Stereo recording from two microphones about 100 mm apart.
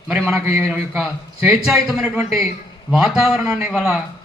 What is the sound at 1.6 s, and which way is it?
A man's voice, 5° right (ahead or behind).